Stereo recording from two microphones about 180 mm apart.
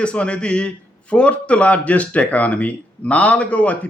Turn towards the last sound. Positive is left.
turn(degrees=10)  # may be behind; listen again after turning